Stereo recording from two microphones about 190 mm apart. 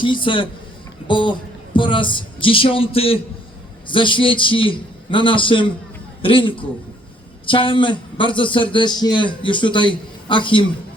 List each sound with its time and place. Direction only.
0.0 s a man's voice: 25° left (ahead or behind)